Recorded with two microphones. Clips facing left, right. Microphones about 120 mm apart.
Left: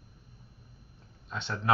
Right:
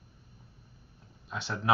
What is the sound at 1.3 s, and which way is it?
Speech, 5° right (ahead or behind).